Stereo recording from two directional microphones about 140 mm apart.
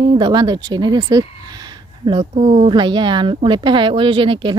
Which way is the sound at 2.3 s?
45° right (ahead or behind).